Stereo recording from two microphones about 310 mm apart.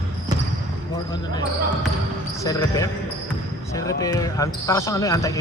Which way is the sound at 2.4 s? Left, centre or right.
Centre.